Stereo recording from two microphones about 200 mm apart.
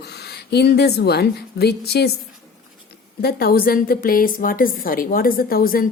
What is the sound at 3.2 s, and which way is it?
A woman's voice, 50° left (ahead or behind).